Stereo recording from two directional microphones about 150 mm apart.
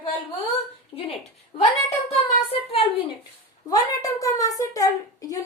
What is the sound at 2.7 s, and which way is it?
Speech, 40° left (ahead or behind).